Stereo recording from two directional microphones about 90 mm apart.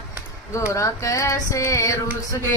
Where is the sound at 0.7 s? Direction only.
35° left (ahead or behind).